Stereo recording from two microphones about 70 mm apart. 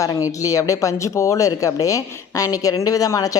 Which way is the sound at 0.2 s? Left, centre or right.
Left.